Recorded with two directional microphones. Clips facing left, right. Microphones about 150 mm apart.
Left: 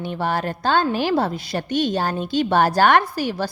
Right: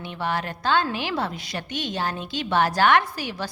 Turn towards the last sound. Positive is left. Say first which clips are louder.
# left 7 dB
turn(degrees=35)  # may be behind; listen again after turning